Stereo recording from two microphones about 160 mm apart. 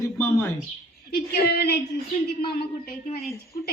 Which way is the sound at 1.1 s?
80° left.